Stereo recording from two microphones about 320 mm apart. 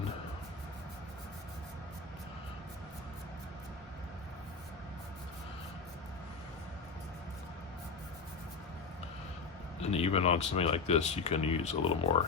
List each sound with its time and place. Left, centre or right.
9.9 s speech: centre